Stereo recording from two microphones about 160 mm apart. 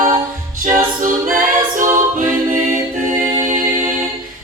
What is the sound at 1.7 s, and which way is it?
Music, 55° right (ahead or behind).